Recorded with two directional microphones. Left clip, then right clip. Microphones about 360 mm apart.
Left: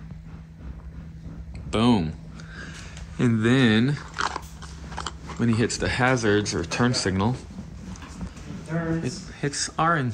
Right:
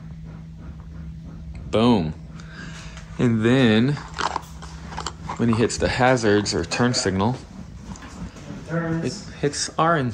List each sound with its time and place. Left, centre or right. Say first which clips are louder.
1.7 s speech: right 3 dB; centre
3.2 s speech: right 3 dB; centre
9.0 s speech: right 5 dB; centre